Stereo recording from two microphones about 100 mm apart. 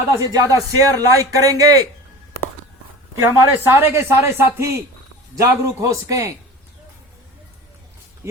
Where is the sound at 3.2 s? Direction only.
25° right (ahead or behind).